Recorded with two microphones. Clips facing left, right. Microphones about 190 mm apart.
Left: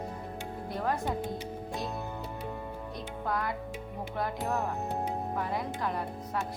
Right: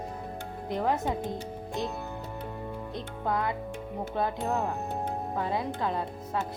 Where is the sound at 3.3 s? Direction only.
20° right (ahead or behind).